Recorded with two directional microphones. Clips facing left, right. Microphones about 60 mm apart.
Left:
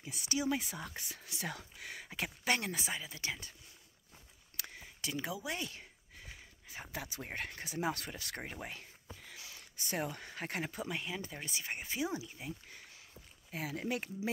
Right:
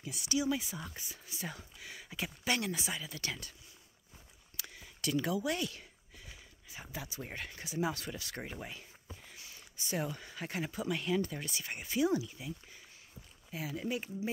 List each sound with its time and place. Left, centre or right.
0.0 s speech: left
1.0 s speech: left
1.8 s speech: left
3.0 s speech: centre
4.6 s a sound: left
5.0 s speech: centre
5.7 s sneeze: left
6.9 s speech: left
9.2 s a sound: left
9.8 s speech: left
10.8 s speech: left
13.5 s speech: left